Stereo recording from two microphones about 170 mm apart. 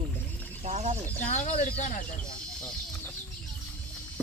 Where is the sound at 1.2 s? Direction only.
40° left (ahead or behind).